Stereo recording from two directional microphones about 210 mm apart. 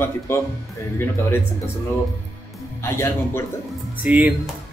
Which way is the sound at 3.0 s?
10° left (ahead or behind).